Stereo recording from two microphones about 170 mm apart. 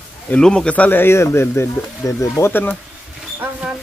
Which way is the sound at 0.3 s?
5° left (ahead or behind).